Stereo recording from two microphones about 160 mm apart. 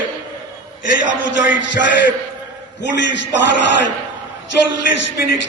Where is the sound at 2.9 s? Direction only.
90° left.